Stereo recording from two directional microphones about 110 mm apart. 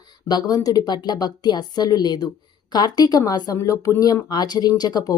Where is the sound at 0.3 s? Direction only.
35° left (ahead or behind).